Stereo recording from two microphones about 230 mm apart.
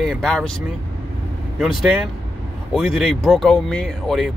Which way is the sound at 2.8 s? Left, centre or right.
Centre.